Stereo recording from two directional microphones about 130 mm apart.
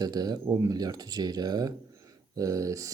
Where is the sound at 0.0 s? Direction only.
30° right (ahead or behind).